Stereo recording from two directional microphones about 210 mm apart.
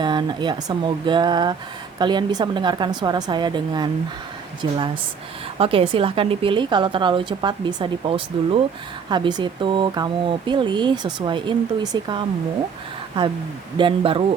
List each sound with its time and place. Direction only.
0.0 s speech: 20° right (ahead or behind)
5.5 s speech: 25° right (ahead or behind)
13.7 s speech: 25° right (ahead or behind)